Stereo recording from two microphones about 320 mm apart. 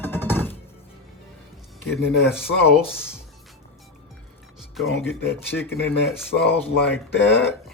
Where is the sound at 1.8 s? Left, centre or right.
Left.